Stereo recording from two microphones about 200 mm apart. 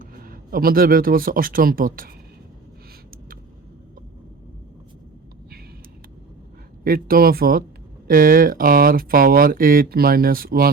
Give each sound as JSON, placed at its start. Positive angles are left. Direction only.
{"t": 0.0, "sound": "speech", "side_deg": -45}
{"t": 6.8, "sound": "speech", "side_deg": -45}